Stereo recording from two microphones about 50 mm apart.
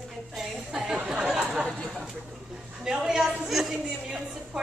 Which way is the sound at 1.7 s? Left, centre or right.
Centre.